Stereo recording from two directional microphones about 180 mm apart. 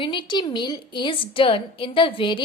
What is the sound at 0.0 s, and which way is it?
A woman's voice, 25° left (ahead or behind).